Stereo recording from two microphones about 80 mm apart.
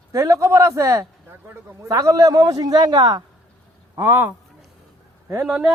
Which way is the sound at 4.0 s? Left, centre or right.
Right.